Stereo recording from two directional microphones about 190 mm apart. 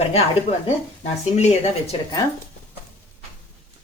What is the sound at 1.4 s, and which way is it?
Speech, 35° left (ahead or behind).